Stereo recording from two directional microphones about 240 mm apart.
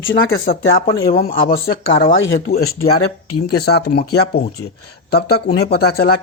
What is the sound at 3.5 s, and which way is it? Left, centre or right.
Speech, left.